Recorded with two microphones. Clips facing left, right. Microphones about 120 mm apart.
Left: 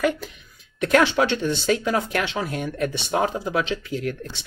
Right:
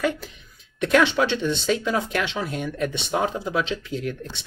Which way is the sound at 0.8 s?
45° left (ahead or behind).